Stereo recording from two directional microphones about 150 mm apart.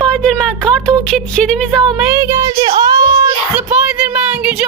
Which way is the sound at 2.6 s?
30° right (ahead or behind).